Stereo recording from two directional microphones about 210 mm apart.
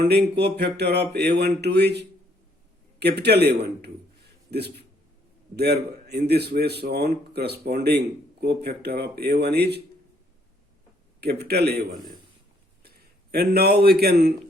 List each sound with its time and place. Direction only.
0.0 s speech: 50° right (ahead or behind)
11.2 s a man's voice: 50° right (ahead or behind)